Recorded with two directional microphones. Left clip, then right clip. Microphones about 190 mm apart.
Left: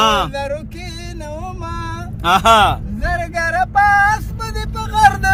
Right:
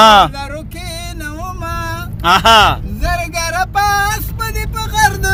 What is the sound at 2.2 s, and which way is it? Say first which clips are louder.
Speech: right 3 dB; 5° left (ahead or behind).